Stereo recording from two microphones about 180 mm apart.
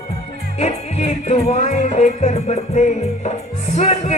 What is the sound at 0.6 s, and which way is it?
Speech, 35° left (ahead or behind).